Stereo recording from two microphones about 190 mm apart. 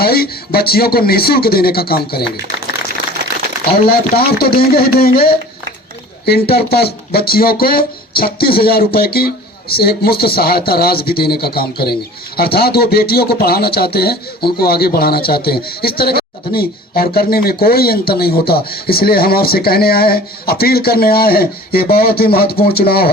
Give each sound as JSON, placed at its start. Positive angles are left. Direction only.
{"t": 0.0, "sound": "speech", "side_deg": 55}
{"t": 3.7, "sound": "speech", "side_deg": 55}